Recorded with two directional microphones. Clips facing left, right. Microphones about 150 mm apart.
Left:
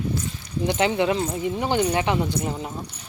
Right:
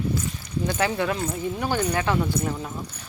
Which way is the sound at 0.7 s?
20° left (ahead or behind).